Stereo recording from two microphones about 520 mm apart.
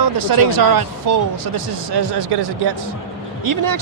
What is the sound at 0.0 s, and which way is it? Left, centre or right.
Speech, right.